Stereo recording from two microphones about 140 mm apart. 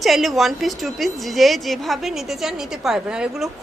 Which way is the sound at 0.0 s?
Centre (ahead or behind).